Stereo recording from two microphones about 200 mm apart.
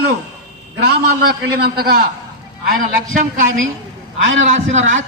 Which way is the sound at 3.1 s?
40° right (ahead or behind).